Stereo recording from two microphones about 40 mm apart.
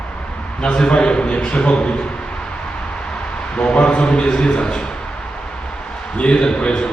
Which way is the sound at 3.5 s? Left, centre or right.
Left.